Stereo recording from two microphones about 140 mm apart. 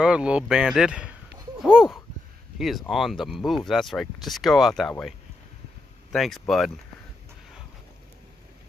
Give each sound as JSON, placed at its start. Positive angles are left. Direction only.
{"t": 0.0, "sound": "speech", "side_deg": -5}
{"t": 6.1, "sound": "speech", "side_deg": 0}